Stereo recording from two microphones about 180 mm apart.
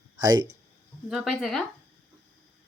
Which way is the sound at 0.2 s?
20° right (ahead or behind).